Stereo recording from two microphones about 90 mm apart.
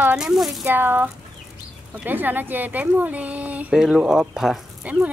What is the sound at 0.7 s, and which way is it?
Speech, 20° right (ahead or behind).